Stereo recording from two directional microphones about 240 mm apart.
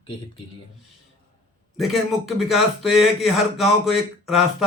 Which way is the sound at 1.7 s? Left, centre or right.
Centre.